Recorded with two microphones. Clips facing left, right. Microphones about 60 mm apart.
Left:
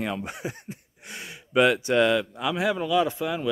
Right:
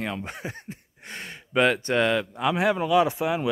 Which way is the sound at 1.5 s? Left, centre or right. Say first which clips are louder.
Left 1 dB; centre.